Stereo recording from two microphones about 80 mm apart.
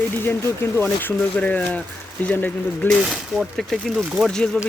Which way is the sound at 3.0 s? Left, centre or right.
Centre.